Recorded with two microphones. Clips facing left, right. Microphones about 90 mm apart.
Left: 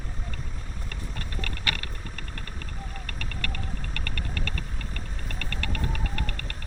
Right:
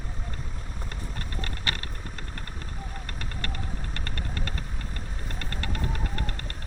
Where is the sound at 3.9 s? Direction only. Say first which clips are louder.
Left 1 dB; 30° right (ahead or behind).